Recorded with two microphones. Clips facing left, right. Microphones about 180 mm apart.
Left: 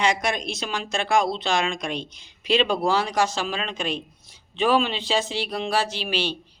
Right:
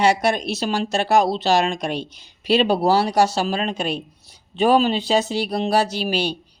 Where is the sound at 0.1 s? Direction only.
35° right (ahead or behind).